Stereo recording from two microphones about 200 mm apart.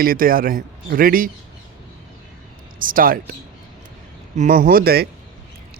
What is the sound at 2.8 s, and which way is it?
A man's voice, 45° right (ahead or behind).